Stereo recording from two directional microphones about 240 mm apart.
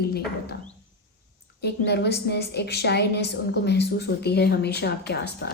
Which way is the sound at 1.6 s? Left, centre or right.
Left.